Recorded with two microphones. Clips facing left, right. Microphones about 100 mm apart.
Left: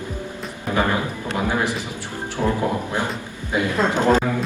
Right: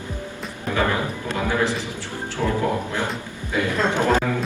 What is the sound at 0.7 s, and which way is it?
Music, 20° left (ahead or behind).